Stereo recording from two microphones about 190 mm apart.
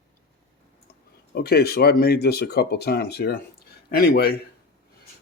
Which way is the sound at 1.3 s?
55° left (ahead or behind).